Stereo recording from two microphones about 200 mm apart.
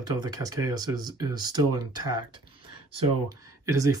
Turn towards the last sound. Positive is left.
turn(degrees=-15)  # may be behind; listen again after turning